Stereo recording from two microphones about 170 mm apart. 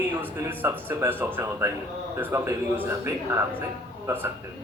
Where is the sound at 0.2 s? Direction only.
10° right (ahead or behind).